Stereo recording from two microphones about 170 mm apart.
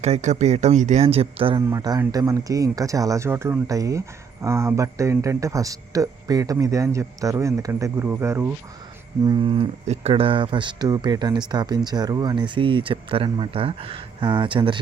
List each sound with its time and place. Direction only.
0.0 s speech: 40° right (ahead or behind)
1.7 s a man's voice: 20° right (ahead or behind)
9.2 s speech: 25° right (ahead or behind)